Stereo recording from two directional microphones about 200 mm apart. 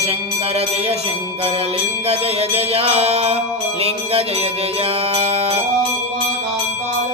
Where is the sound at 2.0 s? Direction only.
30° right (ahead or behind).